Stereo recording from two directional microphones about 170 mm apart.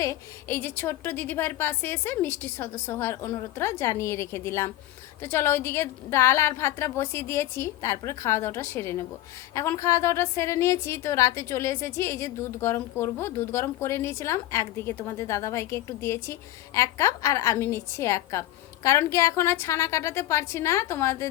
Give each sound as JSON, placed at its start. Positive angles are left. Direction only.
{"t": 0.0, "sound": "a woman's voice", "side_deg": 15}